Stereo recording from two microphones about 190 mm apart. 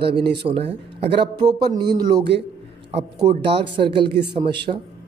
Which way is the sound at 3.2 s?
30° right (ahead or behind).